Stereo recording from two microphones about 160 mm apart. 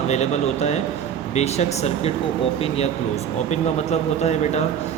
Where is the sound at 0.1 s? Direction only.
45° left (ahead or behind).